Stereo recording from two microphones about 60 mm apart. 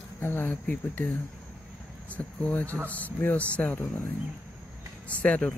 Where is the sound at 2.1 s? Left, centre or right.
Left.